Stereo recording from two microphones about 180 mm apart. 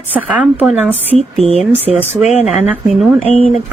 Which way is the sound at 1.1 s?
35° right (ahead or behind).